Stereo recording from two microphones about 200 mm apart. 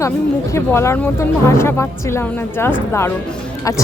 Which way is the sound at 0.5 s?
15° left (ahead or behind).